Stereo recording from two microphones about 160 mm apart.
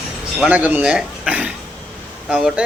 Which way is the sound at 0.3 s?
10° right (ahead or behind).